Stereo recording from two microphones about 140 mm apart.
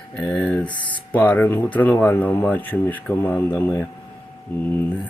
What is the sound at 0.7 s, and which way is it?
Speech, 35° left (ahead or behind).